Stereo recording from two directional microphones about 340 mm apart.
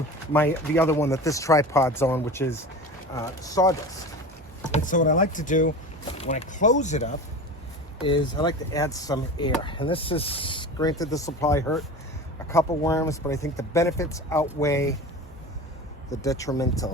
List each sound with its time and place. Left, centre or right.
0.3 s speech: centre
4.7 s speech: left
16.0 s speech: centre